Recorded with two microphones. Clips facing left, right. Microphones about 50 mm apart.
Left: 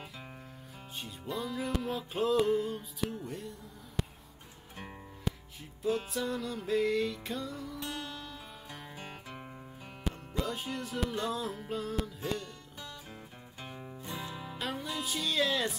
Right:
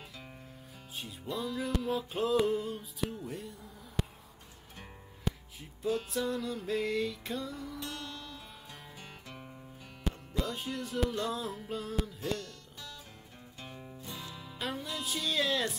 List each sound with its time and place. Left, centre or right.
0.9 s music: centre
7.9 s music: centre
8.9 s guitar: centre
10.0 s music: centre
13.6 s music: centre
14.6 s music: centre